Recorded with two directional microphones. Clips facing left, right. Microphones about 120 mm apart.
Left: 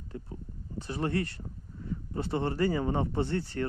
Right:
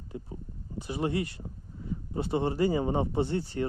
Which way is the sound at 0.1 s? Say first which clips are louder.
Right 2 dB; 20° right (ahead or behind).